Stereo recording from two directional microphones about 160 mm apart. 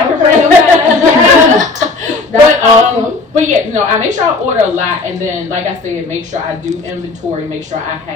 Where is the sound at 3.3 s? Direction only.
50° right (ahead or behind).